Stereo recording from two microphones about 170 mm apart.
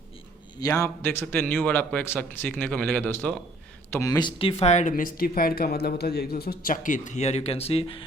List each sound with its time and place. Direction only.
0.6 s a man's voice: 20° left (ahead or behind)
3.9 s speech: 20° left (ahead or behind)